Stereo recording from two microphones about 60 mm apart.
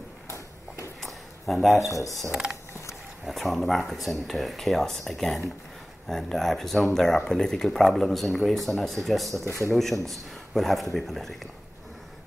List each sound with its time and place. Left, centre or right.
1.0 s a sound: centre
1.9 s speech: left
3.3 s speech: centre